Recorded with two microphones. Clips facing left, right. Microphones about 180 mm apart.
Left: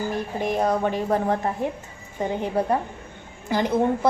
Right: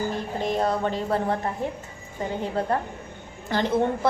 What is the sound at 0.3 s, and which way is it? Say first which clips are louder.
A woman's voice: left 2 dB; 15° left (ahead or behind).